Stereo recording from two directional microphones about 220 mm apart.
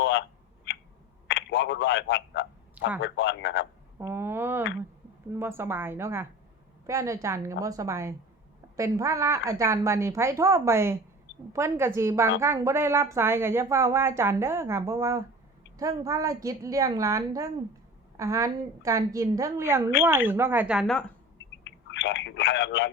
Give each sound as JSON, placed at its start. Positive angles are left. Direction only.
{"t": 0.0, "sound": "telephone", "side_deg": 55}
{"t": 3.0, "sound": "a man's voice", "side_deg": 55}
{"t": 3.9, "sound": "a sound", "side_deg": -10}
{"t": 5.3, "sound": "speech", "side_deg": -10}
{"t": 21.6, "sound": "speech", "side_deg": 55}